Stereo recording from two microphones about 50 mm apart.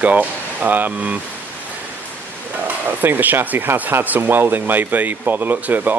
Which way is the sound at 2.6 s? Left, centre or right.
Right.